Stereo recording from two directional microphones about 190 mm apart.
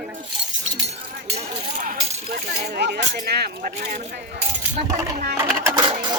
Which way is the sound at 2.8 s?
65° right (ahead or behind).